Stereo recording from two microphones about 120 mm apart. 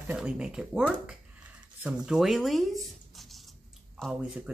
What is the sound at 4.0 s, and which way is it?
Speech, 5° left (ahead or behind).